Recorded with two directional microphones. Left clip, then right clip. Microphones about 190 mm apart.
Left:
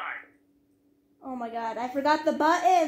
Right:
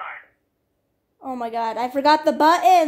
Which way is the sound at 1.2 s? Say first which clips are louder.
Right 8 dB; 55° right (ahead or behind).